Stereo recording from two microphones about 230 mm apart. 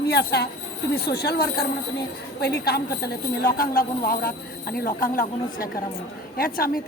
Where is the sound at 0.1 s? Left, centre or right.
Left.